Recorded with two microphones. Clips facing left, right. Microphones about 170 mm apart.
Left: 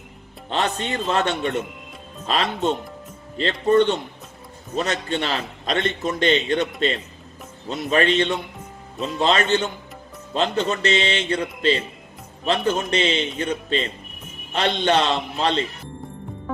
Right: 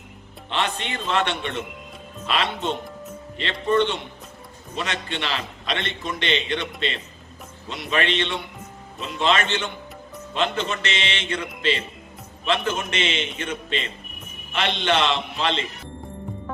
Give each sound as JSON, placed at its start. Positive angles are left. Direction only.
{"t": 0.5, "sound": "a man's voice", "side_deg": 40}